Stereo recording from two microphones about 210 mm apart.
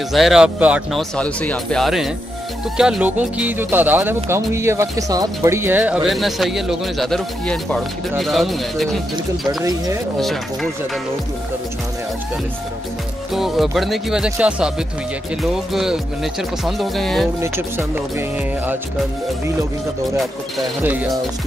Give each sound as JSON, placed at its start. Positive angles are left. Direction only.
{"t": 0.1, "sound": "music", "side_deg": 0}
{"t": 1.1, "sound": "music", "side_deg": 5}
{"t": 2.8, "sound": "speech", "side_deg": -5}
{"t": 8.2, "sound": "music", "side_deg": 0}
{"t": 9.5, "sound": "speech", "side_deg": -15}
{"t": 10.1, "sound": "music", "side_deg": 0}
{"t": 13.3, "sound": "music", "side_deg": 0}
{"t": 17.4, "sound": "speech", "side_deg": -10}
{"t": 20.2, "sound": "speech", "side_deg": -5}